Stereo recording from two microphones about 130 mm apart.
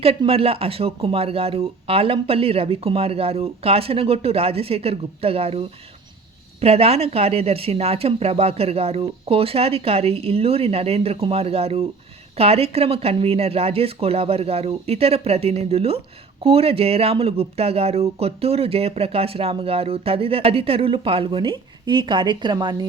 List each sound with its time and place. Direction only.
0.0 s speech: 50° right (ahead or behind)